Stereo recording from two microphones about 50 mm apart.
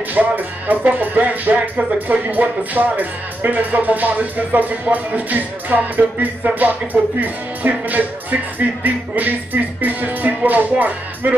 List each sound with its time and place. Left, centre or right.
0.1 s speech: right